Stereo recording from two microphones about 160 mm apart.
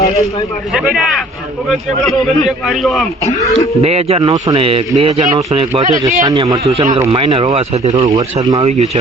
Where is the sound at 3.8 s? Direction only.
40° right (ahead or behind).